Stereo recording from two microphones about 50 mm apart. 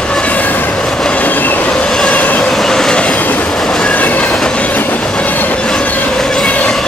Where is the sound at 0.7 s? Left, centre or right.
Centre.